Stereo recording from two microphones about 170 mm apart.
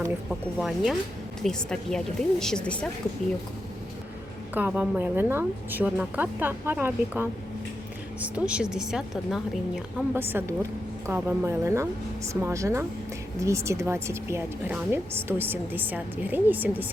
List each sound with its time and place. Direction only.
0.3 s a woman's voice: centre (ahead or behind)
4.5 s a woman's voice: 10° right (ahead or behind)